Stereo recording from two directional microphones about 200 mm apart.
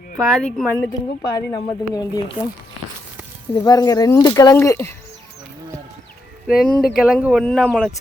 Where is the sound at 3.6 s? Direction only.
20° left (ahead or behind).